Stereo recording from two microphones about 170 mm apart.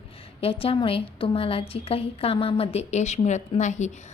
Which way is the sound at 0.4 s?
35° left (ahead or behind).